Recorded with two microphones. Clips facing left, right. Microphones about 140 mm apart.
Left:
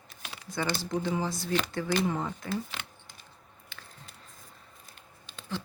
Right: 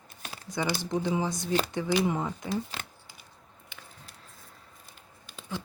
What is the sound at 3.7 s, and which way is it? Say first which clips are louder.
Squish: even; 15° right (ahead or behind).